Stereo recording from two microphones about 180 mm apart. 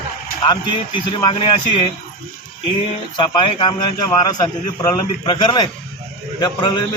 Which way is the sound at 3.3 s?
25° left (ahead or behind).